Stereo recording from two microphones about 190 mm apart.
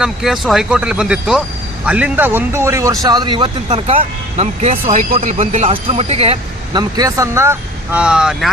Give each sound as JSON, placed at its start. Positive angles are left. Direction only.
{"t": 0.0, "sound": "speech", "side_deg": 0}